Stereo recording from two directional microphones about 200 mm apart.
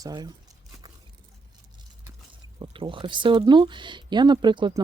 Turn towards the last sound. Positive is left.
turn(degrees=-25)  # may be behind; listen again after turning